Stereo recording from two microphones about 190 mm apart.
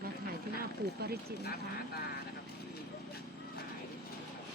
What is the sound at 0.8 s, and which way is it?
Speech, 55° right (ahead or behind).